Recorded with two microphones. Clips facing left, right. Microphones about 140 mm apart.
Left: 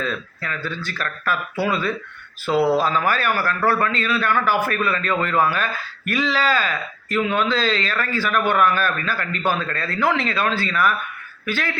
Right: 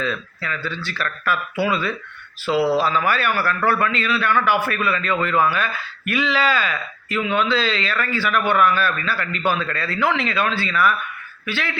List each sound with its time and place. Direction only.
0.0 s a man's voice: 45° left (ahead or behind)